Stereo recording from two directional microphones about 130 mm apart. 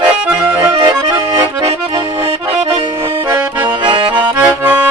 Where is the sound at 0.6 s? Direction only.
25° right (ahead or behind).